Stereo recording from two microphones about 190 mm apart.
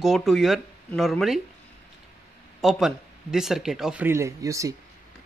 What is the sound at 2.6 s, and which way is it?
Speech, centre (ahead or behind).